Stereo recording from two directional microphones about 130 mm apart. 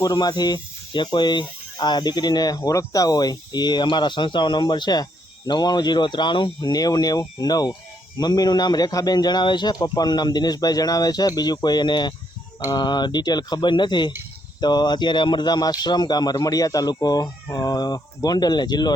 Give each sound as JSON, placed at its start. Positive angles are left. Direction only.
{"t": 0.0, "sound": "speech", "side_deg": 30}